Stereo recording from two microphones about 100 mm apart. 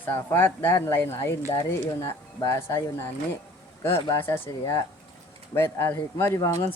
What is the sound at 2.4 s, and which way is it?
Speech, 35° left (ahead or behind).